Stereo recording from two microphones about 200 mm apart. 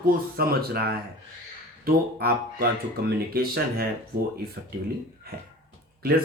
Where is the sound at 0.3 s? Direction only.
50° right (ahead or behind).